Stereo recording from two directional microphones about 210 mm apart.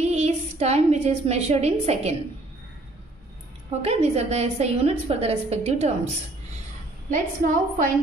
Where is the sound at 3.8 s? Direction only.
30° right (ahead or behind).